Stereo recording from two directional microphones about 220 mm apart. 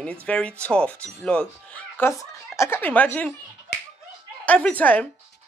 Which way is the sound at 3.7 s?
50° left (ahead or behind).